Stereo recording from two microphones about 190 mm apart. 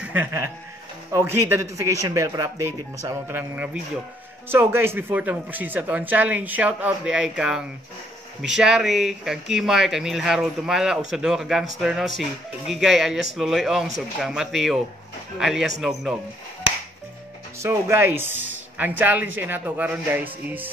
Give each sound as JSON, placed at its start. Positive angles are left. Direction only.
{"t": 0.0, "sound": "speech", "side_deg": -10}
{"t": 17.6, "sound": "speech", "side_deg": -15}